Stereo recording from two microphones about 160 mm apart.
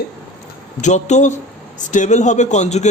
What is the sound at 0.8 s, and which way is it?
A man's voice, 45° left (ahead or behind).